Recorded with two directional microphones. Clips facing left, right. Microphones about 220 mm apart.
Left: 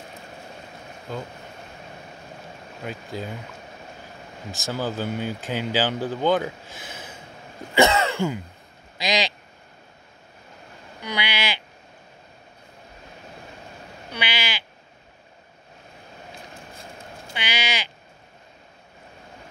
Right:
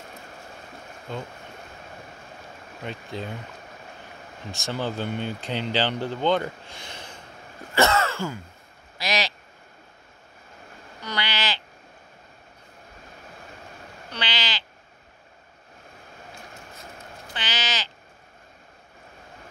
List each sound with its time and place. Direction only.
2.8 s speech: 5° left (ahead or behind)
4.5 s speech: centre (ahead or behind)
7.7 s throat clearing: 15° left (ahead or behind)
8.9 s a sound: 15° left (ahead or behind)
11.0 s a sound: 10° left (ahead or behind)
14.1 s frog: 10° left (ahead or behind)
17.3 s sheep: 10° left (ahead or behind)